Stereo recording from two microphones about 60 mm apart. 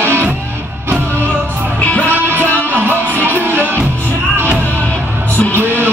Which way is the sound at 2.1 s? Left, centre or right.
Right.